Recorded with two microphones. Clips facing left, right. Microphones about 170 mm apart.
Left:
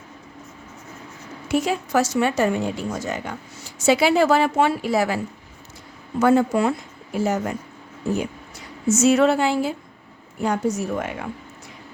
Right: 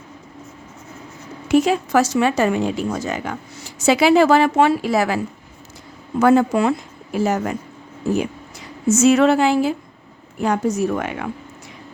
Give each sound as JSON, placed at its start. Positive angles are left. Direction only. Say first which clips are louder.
{"t": 1.5, "sound": "speech", "louder": "right 6 dB", "side_deg": -90}
{"t": 9.0, "sound": "speech", "louder": "right 3 dB", "side_deg": -90}